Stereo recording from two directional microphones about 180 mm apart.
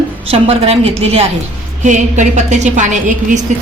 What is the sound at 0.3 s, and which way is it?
A woman's voice, 35° right (ahead or behind).